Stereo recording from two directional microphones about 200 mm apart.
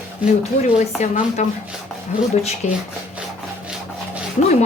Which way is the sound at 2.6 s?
35° left (ahead or behind).